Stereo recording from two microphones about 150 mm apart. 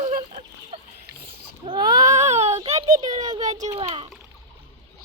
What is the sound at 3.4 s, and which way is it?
Speech, 50° right (ahead or behind).